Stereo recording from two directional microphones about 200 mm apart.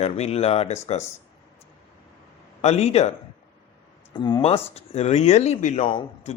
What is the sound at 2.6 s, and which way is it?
Speech, 35° left (ahead or behind).